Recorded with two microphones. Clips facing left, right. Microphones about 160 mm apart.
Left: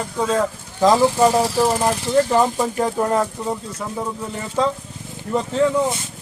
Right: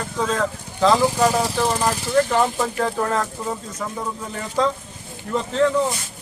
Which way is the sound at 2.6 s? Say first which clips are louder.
Left 2 dB; 15° left (ahead or behind).